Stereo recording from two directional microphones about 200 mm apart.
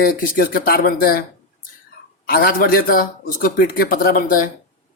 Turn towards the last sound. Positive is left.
turn(degrees=45)  # may be behind; listen again after turning